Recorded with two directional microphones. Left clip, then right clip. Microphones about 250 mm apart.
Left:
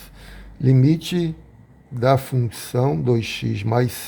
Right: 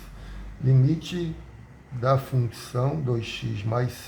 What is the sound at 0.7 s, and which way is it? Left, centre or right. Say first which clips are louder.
Speech: left 8 dB; left.